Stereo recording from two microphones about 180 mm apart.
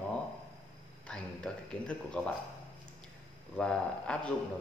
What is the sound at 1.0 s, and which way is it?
Speech, 5° left (ahead or behind).